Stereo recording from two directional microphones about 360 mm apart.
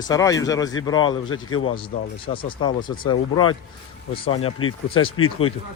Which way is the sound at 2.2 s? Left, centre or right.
Centre.